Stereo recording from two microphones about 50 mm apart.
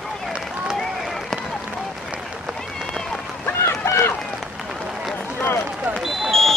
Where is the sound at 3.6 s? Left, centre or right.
Left.